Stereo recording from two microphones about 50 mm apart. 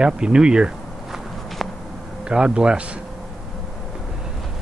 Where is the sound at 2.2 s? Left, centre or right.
Centre.